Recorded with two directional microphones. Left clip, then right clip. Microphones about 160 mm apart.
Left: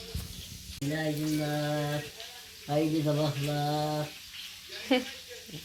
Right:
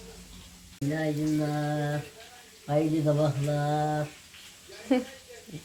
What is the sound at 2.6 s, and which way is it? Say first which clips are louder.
Speech: right 3 dB; 5° right (ahead or behind).